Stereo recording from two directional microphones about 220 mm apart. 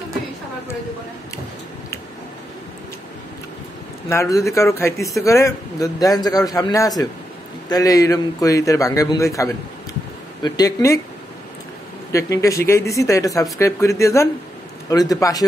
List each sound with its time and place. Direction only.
4.1 s a man's voice: 15° left (ahead or behind)
12.1 s a man's voice: 15° left (ahead or behind)